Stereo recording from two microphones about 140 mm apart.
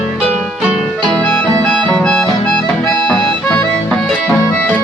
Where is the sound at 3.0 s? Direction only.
10° left (ahead or behind).